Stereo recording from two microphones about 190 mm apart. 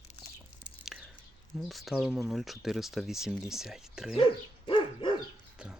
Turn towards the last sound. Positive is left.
turn(degrees=-5)  # may be behind; listen again after turning